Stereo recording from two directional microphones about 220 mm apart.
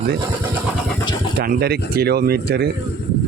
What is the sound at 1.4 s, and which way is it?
Speech, 45° right (ahead or behind).